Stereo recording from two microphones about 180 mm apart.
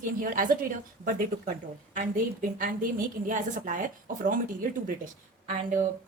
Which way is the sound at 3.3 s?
45° right (ahead or behind).